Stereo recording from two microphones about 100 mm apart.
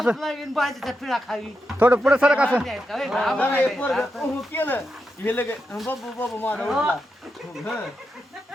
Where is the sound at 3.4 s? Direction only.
15° left (ahead or behind).